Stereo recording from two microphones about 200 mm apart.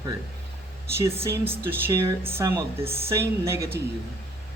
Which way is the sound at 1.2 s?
10° right (ahead or behind).